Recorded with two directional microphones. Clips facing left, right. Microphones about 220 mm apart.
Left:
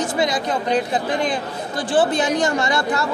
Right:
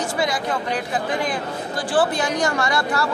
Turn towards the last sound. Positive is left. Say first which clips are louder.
# left 2 dB
turn(degrees=20)  # may be behind; listen again after turning